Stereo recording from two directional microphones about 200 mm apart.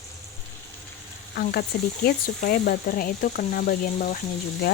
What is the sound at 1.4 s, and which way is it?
Speech, 50° left (ahead or behind).